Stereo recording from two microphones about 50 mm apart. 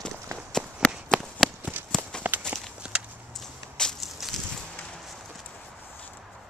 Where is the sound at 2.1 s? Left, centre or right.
Centre.